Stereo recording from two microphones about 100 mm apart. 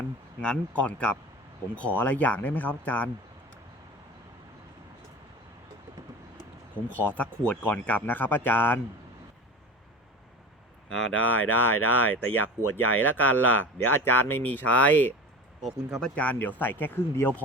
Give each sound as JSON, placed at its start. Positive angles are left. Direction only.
{"t": 0.4, "sound": "speech", "side_deg": 10}
{"t": 6.9, "sound": "speech", "side_deg": 15}
{"t": 10.8, "sound": "speech", "side_deg": 15}
{"t": 15.6, "sound": "speech", "side_deg": 0}